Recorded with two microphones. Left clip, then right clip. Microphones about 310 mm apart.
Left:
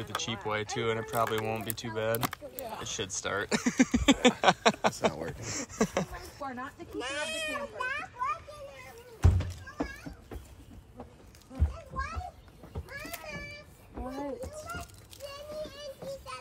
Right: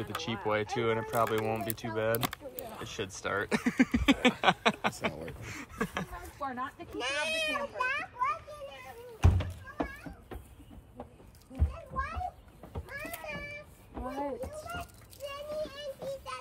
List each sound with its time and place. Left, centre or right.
0.0 s speech: centre
6.4 s a child's voice: right
9.2 s music: right
11.7 s children playing: right
13.9 s a sound: right